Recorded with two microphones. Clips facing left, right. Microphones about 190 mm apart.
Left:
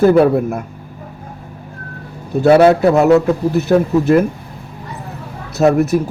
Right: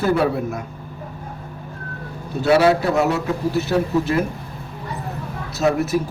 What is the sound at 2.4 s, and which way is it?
Speech, 50° left (ahead or behind).